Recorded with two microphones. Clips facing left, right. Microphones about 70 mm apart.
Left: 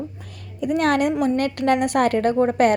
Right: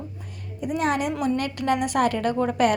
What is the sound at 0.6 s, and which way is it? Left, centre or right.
Speech, left.